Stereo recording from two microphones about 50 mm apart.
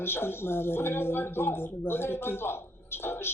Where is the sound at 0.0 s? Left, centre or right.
Left.